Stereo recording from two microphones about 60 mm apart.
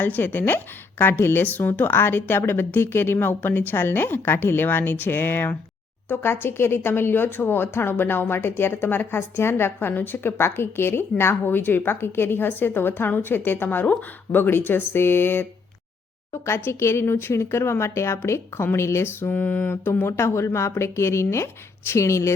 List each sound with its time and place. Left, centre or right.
0.0 s a woman's voice: left
16.6 s speech: left
19.7 s speech: left